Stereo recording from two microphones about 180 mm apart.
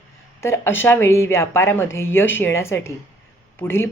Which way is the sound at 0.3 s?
15° left (ahead or behind).